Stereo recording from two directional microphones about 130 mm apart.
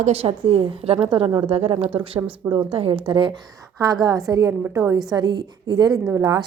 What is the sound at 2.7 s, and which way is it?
Speech, 45° right (ahead or behind).